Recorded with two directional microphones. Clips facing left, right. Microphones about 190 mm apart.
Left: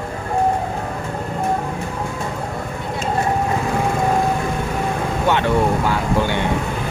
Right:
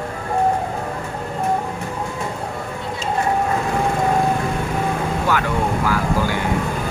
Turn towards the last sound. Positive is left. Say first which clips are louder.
# left 1 dB
turn(degrees=25)  # may be behind; listen again after turning